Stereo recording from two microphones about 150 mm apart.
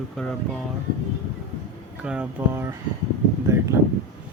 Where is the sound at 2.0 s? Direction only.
10° right (ahead or behind).